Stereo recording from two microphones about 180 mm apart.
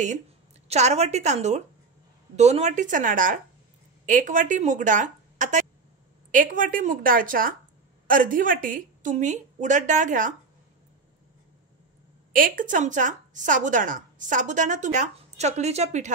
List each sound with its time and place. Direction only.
0.7 s a woman's voice: 40° right (ahead or behind)
12.3 s a woman's voice: 50° right (ahead or behind)